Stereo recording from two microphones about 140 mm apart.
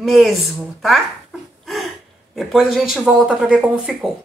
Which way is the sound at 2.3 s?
Centre (ahead or behind).